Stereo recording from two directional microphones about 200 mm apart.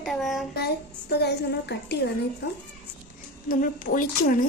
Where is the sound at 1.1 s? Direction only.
55° left (ahead or behind).